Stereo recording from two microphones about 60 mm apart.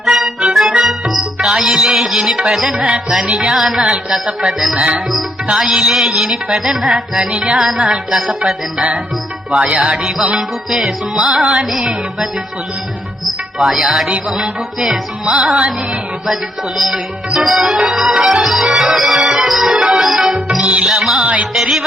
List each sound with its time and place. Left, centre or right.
0.0 s music: centre
7.2 s music: centre
7.6 s music: centre
9.5 s music: centre
16.2 s music: centre
19.3 s organ: centre
20.7 s music: centre
21.2 s music: right
21.5 s music: centre